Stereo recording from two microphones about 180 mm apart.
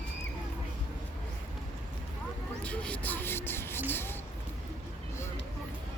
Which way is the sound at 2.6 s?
5° left (ahead or behind).